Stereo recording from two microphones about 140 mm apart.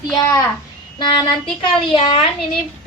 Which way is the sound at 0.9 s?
35° left (ahead or behind).